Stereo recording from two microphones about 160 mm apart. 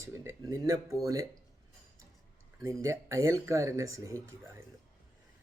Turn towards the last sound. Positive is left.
turn(degrees=-20)  # may be behind; listen again after turning